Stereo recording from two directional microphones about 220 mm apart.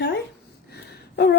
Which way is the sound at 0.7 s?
50° left (ahead or behind).